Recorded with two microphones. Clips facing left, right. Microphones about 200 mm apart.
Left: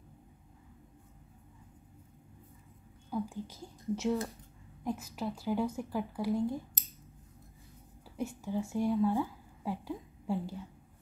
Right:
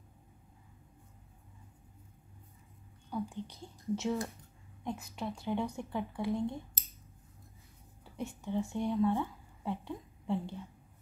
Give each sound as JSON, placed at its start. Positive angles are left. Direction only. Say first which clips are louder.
{"t": 3.1, "sound": "speech", "louder": "left 2 dB", "side_deg": 5}
{"t": 8.0, "sound": "a woman's voice", "louder": "left 3 dB", "side_deg": 0}